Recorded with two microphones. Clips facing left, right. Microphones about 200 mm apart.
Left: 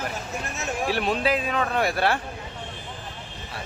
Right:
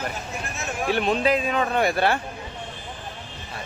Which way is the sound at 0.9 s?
5° left (ahead or behind).